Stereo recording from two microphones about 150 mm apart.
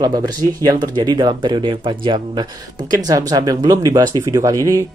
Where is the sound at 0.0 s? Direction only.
25° right (ahead or behind).